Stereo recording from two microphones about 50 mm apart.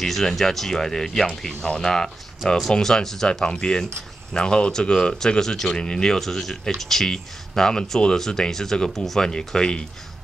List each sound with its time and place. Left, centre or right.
0.0 s speech: centre